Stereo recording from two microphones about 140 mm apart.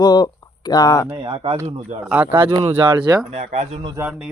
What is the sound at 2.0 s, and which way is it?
Speech, 10° right (ahead or behind).